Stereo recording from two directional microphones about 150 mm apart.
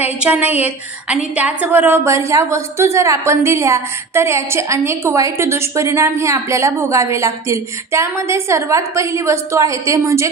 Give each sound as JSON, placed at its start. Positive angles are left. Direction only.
{"t": 0.0, "sound": "a woman's voice", "side_deg": -10}